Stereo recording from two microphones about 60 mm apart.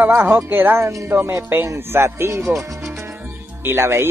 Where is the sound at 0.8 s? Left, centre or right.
Right.